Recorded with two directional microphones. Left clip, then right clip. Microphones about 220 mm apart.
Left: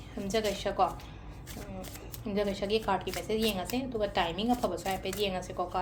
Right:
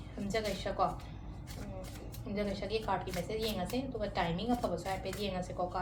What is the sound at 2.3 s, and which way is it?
A woman's voice, 50° left (ahead or behind).